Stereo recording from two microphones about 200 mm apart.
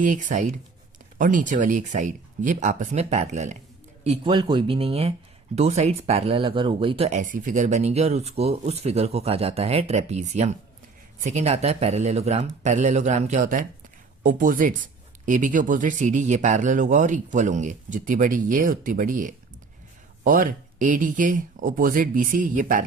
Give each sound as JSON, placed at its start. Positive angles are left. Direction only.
{"t": 0.0, "sound": "speech", "side_deg": -40}